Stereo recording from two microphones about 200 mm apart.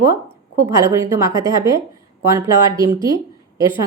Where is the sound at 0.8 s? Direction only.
15° right (ahead or behind).